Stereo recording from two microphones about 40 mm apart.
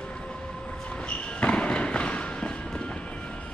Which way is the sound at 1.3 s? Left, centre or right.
Left.